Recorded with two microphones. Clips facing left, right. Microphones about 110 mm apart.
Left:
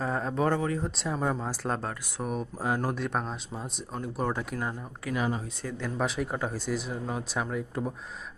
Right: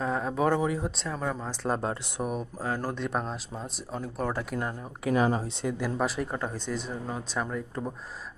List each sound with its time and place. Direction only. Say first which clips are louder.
0.0 s speech: right 1 dB; centre (ahead or behind)
1.0 s speech: left 2 dB; 15° left (ahead or behind)
1.8 s speech: right 4 dB; 20° right (ahead or behind)
2.2 s speech: even; centre (ahead or behind)
2.6 s speech: left 5 dB; 15° left (ahead or behind)
3.0 s speech: even; centre (ahead or behind)
5.1 s speech: right 5 dB; 40° right (ahead or behind)
5.6 s speech: right 4 dB; 10° right (ahead or behind)
6.0 s speech: even; centre (ahead or behind)